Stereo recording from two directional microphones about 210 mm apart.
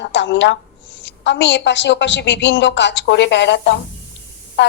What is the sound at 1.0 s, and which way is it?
Speech, 60° left (ahead or behind).